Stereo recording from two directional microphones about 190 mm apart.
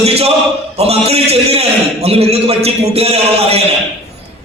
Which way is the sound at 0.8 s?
35° right (ahead or behind).